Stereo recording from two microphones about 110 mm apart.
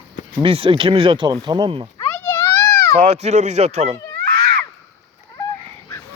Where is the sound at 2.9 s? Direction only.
70° right (ahead or behind).